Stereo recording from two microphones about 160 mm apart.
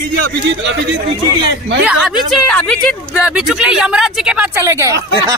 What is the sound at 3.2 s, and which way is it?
Speech, 5° right (ahead or behind).